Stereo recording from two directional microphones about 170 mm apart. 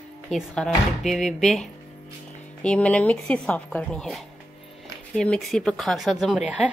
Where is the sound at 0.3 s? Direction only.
Centre (ahead or behind).